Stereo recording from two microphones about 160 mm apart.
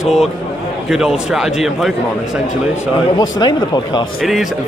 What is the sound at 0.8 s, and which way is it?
Speech, centre (ahead or behind).